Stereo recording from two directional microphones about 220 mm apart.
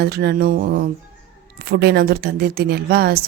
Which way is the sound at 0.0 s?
45° right (ahead or behind).